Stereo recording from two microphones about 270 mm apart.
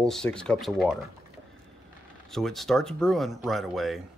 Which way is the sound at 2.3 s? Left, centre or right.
Centre.